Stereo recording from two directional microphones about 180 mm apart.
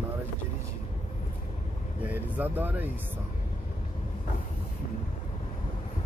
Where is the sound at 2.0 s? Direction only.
10° right (ahead or behind).